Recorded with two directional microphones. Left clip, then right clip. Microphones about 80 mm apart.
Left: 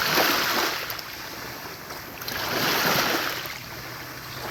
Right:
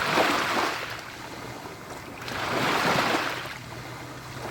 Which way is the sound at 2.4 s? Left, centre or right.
Left.